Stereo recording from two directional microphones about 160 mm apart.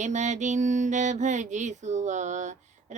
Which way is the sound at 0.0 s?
50° right (ahead or behind).